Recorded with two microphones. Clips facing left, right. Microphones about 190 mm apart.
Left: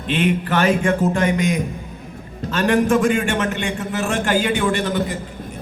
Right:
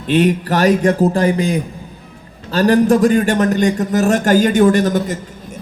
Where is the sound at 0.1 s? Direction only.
40° right (ahead or behind).